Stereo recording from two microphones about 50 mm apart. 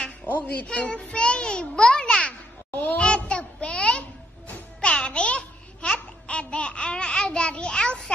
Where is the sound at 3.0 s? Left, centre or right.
Left.